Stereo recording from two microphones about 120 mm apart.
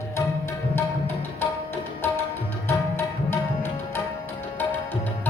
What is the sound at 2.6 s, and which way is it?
Music, 20° left (ahead or behind).